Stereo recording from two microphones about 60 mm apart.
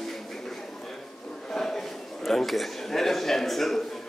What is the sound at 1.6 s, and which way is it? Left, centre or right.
A man's voice, centre.